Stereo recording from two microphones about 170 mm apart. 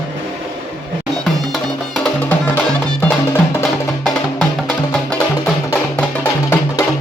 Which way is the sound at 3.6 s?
5° left (ahead or behind).